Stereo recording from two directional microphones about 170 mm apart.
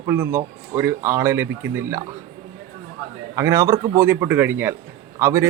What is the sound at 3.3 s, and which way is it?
Speech, 15° right (ahead or behind).